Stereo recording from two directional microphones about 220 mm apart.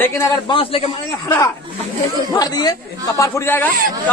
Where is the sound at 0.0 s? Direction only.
15° left (ahead or behind).